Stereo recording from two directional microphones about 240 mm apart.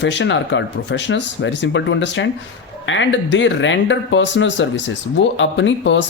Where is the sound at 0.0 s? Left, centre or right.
Left.